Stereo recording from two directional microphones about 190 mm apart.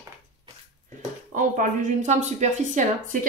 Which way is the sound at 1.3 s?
45° right (ahead or behind).